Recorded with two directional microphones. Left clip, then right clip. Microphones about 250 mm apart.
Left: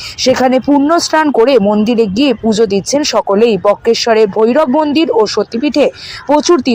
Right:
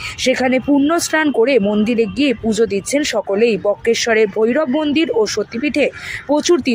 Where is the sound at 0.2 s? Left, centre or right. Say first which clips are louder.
Left 6 dB; centre.